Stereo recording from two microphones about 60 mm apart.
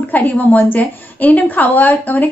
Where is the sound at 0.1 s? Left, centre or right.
Left.